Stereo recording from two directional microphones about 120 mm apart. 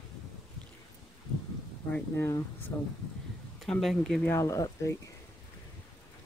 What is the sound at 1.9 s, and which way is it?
Speech, 15° left (ahead or behind).